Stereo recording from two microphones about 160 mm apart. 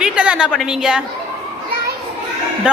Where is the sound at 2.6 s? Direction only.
5° right (ahead or behind).